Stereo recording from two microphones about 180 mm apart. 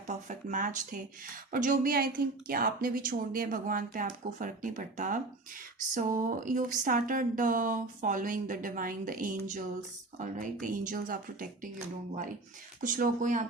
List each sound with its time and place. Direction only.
0.1 s speech: 45° right (ahead or behind)
12.8 s speech: 50° right (ahead or behind)